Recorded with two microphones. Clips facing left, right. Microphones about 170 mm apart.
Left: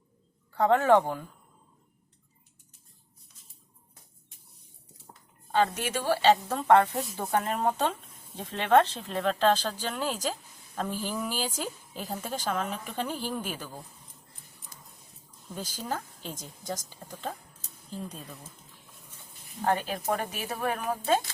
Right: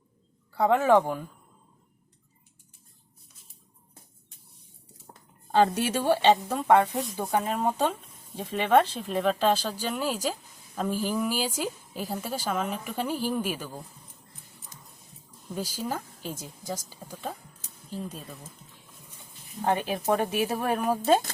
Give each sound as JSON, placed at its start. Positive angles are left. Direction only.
{"t": 0.5, "sound": "speech", "side_deg": -10}
{"t": 5.5, "sound": "a woman's voice", "side_deg": -30}
{"t": 6.3, "sound": "speech", "side_deg": -10}
{"t": 15.5, "sound": "speech", "side_deg": -10}
{"t": 19.6, "sound": "a woman's voice", "side_deg": -20}